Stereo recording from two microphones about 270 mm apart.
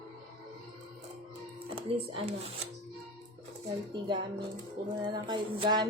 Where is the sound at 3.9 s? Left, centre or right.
Centre.